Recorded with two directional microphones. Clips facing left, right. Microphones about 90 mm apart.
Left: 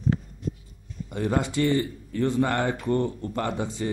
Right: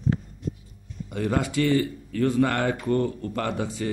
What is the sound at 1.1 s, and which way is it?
Speech, 25° left (ahead or behind).